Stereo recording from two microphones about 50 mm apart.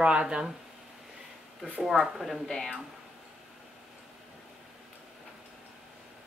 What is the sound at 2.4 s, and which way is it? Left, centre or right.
Speech, centre.